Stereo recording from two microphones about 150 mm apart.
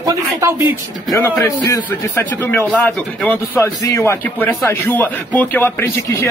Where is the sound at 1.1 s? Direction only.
20° left (ahead or behind).